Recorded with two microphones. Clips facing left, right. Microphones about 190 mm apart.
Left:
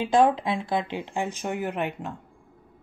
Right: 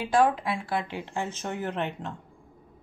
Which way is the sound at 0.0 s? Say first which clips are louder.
Left 3 dB; 20° left (ahead or behind).